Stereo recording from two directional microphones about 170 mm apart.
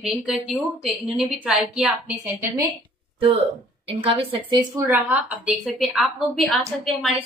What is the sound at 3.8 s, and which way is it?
Speech, 30° right (ahead or behind).